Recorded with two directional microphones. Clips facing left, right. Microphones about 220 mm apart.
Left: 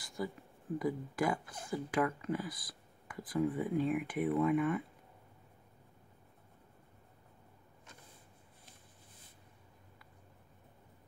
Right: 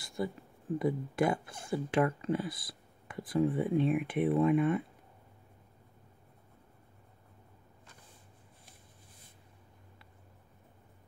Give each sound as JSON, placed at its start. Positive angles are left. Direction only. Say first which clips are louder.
{"t": 0.2, "sound": "speech", "louder": "right 4 dB", "side_deg": -25}